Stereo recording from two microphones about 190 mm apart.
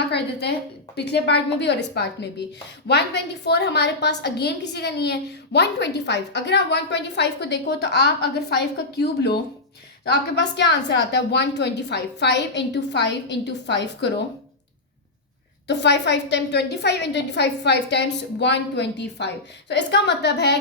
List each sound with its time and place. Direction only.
0.1 s a woman's voice: 60° left (ahead or behind)
15.6 s a woman's voice: 65° left (ahead or behind)